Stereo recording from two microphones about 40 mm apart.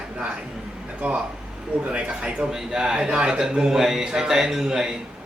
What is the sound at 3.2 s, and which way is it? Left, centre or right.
A man's voice, right.